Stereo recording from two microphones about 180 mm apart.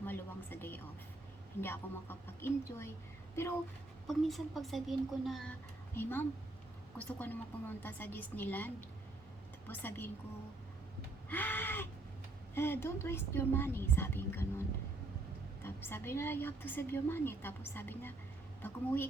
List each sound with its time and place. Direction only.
0.0 s a sound: 10° left (ahead or behind)
1.6 s a woman's voice: 10° left (ahead or behind)
4.0 s speech: centre (ahead or behind)
5.9 s a woman's voice: 10° left (ahead or behind)
11.3 s a woman's voice: 10° left (ahead or behind)
15.6 s a woman's voice: 10° left (ahead or behind)